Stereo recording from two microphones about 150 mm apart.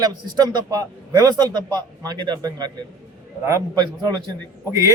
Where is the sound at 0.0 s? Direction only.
25° right (ahead or behind).